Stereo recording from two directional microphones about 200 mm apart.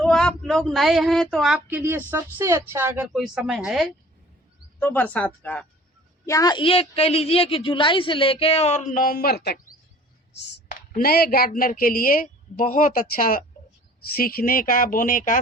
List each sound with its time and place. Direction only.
0.0 s speech: 5° left (ahead or behind)
4.8 s speech: 10° left (ahead or behind)
6.2 s a man's voice: 15° left (ahead or behind); by 15.4 s 40° left (ahead or behind)